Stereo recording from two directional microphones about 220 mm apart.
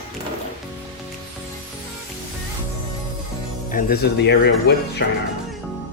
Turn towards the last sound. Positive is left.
turn(degrees=50)  # may be behind; listen again after turning